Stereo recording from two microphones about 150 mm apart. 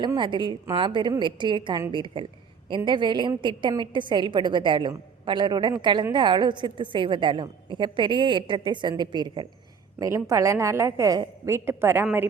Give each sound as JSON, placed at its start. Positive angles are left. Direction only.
{"t": 0.0, "sound": "a woman's voice", "side_deg": -30}